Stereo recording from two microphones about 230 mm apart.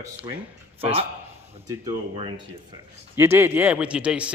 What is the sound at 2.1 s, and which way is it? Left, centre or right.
Speech, centre.